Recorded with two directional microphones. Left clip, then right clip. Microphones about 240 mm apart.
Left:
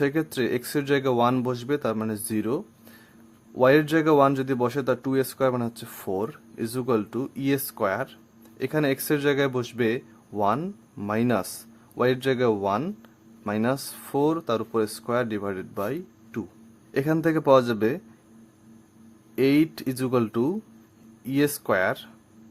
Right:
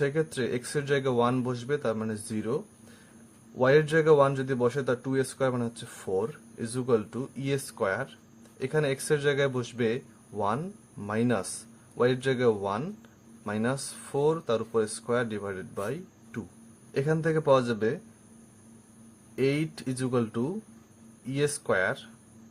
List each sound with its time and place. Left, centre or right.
0.0 s speech: left
3.6 s speech: left
19.4 s speech: left